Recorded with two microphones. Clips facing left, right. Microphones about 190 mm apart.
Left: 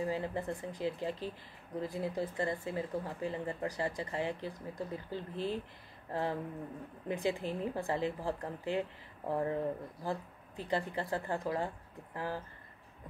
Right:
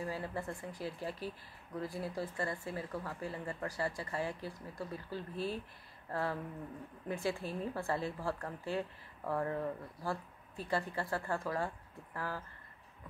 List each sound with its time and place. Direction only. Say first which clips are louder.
0.0 s speech: left 4 dB; 20° left (ahead or behind)